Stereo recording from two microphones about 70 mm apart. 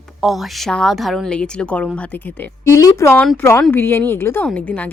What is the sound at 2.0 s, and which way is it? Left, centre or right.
Speech, left.